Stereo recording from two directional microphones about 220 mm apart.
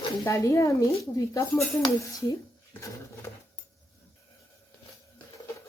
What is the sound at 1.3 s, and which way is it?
Speech, 15° left (ahead or behind).